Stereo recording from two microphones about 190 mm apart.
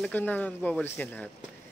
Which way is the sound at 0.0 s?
10° left (ahead or behind).